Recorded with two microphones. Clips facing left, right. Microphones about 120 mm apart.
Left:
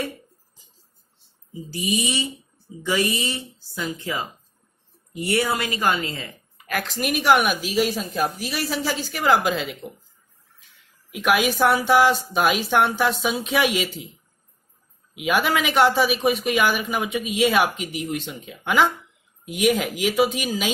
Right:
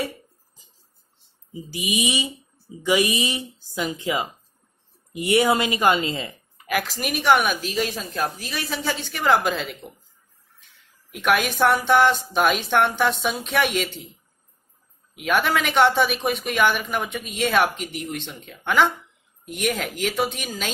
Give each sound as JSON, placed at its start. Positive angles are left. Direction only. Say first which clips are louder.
{"t": 1.7, "sound": "speech", "louder": "even", "side_deg": -15}
{"t": 6.7, "sound": "speech", "louder": "even", "side_deg": -5}
{"t": 11.1, "sound": "speech", "louder": "left 1 dB", "side_deg": 0}
{"t": 15.1, "sound": "speech", "louder": "even", "side_deg": 5}